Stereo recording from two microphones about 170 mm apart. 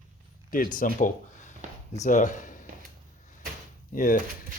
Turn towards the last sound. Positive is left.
turn(degrees=50)  # may be behind; listen again after turning